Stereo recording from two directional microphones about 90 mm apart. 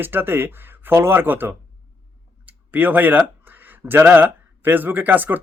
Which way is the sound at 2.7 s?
20° right (ahead or behind).